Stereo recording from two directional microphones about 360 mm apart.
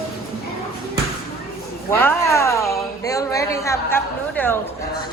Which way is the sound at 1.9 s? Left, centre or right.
Centre.